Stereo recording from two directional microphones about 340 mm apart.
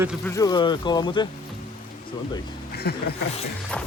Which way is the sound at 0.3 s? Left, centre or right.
Centre.